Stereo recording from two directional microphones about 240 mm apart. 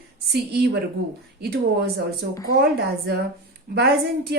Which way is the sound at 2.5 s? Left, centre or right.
Right.